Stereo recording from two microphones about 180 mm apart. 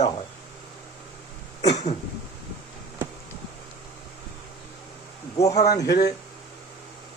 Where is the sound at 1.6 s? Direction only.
40° left (ahead or behind).